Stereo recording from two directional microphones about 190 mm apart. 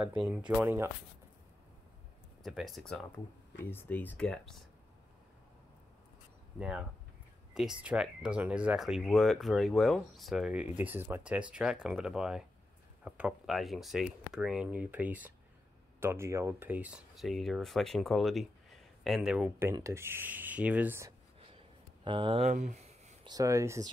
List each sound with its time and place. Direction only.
0.2 s speech: 5° right (ahead or behind)
2.4 s speech: centre (ahead or behind)
7.5 s speech: 5° right (ahead or behind)
21.5 s a sound: 25° right (ahead or behind)
23.2 s speech: 20° right (ahead or behind)